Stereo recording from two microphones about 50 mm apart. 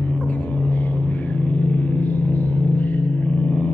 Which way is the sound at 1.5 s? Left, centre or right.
Left.